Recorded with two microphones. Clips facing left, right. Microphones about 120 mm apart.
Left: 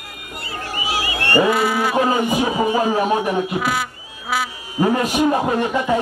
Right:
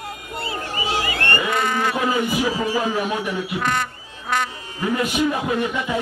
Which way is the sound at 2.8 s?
45° left (ahead or behind).